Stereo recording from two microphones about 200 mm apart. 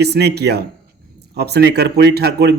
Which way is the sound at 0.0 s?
55° right (ahead or behind).